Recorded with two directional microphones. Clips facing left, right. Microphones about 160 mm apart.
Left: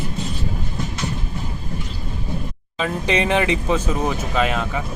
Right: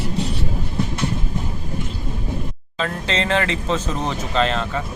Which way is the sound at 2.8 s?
15° left (ahead or behind).